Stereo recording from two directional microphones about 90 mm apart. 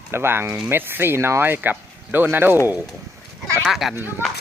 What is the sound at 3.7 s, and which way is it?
Speech, 5° right (ahead or behind).